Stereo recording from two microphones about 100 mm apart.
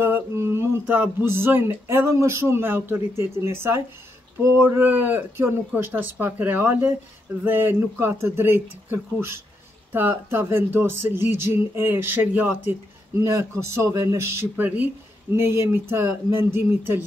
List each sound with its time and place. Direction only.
0.0 s a sound: 25° right (ahead or behind)
4.4 s speech: 20° right (ahead or behind)
13.2 s speech: 30° right (ahead or behind)
15.3 s speech: 25° right (ahead or behind)